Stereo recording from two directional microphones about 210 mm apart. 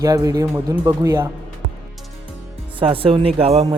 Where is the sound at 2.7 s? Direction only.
25° right (ahead or behind).